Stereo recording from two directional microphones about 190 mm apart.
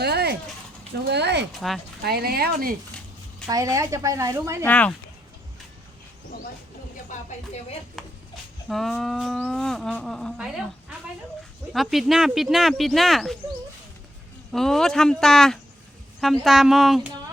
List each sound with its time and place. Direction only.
0.0 s a sound: 60° right (ahead or behind)
1.0 s speech: 60° right (ahead or behind)
1.5 s speech: centre (ahead or behind)
2.0 s speech: 55° right (ahead or behind)
3.5 s speech: 15° right (ahead or behind)
4.6 s speech: 5° left (ahead or behind)
7.1 s speech: 40° left (ahead or behind)
8.0 s a sound: centre (ahead or behind)
8.7 s speech: centre (ahead or behind)
14.5 s speech: centre (ahead or behind)